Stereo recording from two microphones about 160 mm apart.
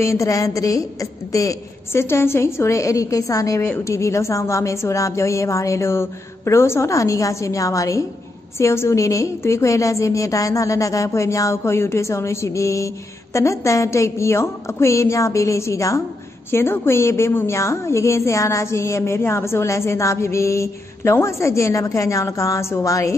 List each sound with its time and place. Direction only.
0.0 s a woman's voice: 20° left (ahead or behind)